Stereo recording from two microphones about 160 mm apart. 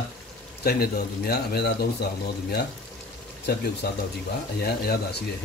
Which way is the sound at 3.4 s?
90° left.